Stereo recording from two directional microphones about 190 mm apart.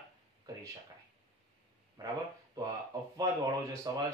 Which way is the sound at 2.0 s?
20° right (ahead or behind).